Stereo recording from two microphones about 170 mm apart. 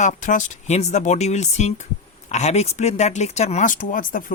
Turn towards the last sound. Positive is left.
turn(degrees=55)  # may be behind; listen again after turning